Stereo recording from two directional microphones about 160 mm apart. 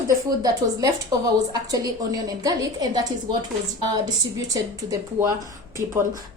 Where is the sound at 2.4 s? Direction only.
25° right (ahead or behind).